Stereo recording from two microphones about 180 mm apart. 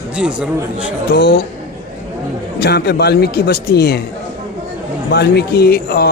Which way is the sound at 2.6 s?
65° left (ahead or behind).